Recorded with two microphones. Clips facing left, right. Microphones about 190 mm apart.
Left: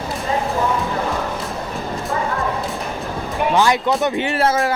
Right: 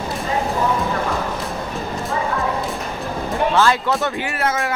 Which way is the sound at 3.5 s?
15° left (ahead or behind).